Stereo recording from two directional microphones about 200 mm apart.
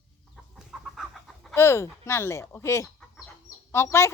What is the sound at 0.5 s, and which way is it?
Chicken, centre (ahead or behind).